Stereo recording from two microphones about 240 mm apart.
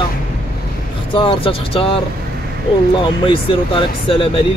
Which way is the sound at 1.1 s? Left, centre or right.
Left.